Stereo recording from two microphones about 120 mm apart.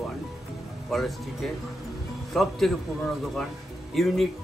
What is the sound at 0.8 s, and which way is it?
Speech, centre (ahead or behind).